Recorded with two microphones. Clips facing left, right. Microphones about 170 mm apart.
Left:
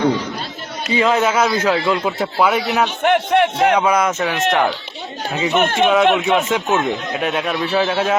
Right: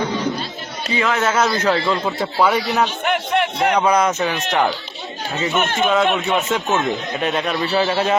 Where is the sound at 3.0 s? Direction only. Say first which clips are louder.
Left 5 dB; 50° left (ahead or behind).